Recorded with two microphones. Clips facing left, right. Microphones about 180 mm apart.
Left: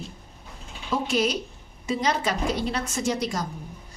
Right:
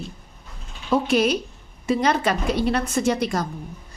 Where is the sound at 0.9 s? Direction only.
60° right (ahead or behind).